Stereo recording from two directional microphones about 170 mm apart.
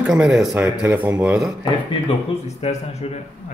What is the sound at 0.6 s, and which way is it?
Speech, 10° right (ahead or behind).